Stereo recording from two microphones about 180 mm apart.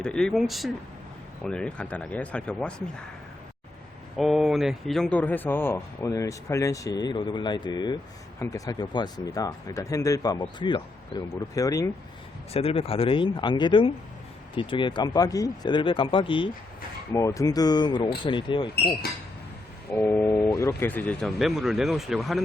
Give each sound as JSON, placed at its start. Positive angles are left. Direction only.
{"t": 0.0, "sound": "speech", "side_deg": 5}
{"t": 4.2, "sound": "speech", "side_deg": 0}
{"t": 12.5, "sound": "speech", "side_deg": 30}
{"t": 17.1, "sound": "speech", "side_deg": 15}
{"t": 19.9, "sound": "speech", "side_deg": 10}